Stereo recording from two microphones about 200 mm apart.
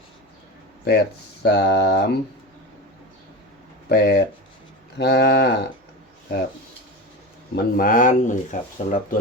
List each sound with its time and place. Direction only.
0.9 s speech: 55° left (ahead or behind)
3.8 s speech: 50° left (ahead or behind)
7.5 s speech: 45° left (ahead or behind)